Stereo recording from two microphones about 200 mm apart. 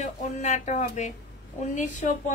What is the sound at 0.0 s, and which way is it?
A woman's voice, 35° left (ahead or behind).